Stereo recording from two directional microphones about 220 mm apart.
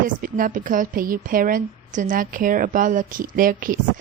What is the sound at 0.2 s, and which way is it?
A woman's voice, 35° right (ahead or behind).